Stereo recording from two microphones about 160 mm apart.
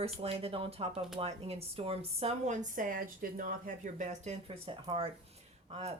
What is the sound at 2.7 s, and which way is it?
Speech, 60° right (ahead or behind).